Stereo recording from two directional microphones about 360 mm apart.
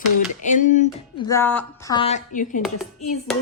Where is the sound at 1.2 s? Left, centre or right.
Centre.